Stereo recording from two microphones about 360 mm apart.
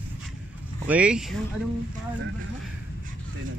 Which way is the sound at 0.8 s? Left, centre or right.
Centre.